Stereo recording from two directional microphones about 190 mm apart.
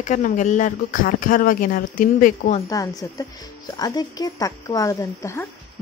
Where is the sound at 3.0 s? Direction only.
20° left (ahead or behind).